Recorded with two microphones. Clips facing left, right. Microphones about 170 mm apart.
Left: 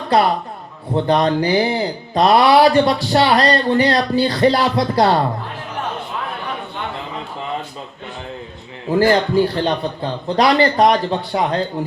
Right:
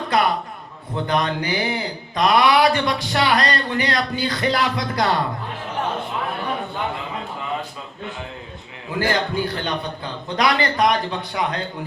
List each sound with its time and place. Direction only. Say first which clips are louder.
0.9 s speech: left 6 dB; 30° left (ahead or behind)
8.9 s speech: left 8 dB; 35° left (ahead or behind)